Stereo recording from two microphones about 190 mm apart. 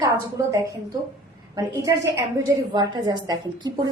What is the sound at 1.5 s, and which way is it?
A woman's voice, 20° right (ahead or behind).